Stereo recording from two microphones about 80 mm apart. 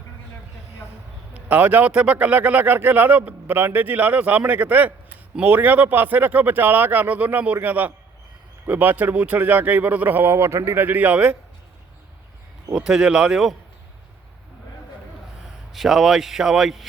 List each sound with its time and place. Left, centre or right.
1.3 s a man's voice: centre
12.7 s speech: centre
15.7 s speech: centre